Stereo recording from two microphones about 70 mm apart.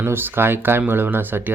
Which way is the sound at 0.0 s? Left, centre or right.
Right.